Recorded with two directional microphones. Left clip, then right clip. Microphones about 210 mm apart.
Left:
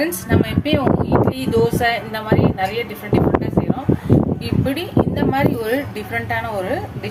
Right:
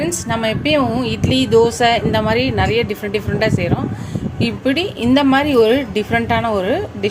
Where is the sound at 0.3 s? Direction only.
40° right (ahead or behind).